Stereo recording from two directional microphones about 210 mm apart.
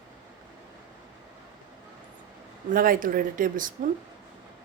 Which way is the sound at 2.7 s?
40° right (ahead or behind).